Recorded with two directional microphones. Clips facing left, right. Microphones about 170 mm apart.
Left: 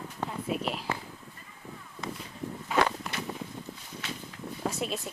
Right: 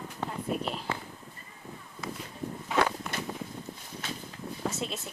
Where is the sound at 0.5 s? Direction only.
40° right (ahead or behind).